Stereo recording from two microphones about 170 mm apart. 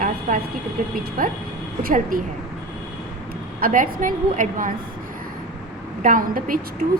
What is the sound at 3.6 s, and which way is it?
A woman's voice, 55° right (ahead or behind).